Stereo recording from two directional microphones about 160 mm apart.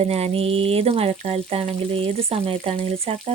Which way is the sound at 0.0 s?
40° right (ahead or behind).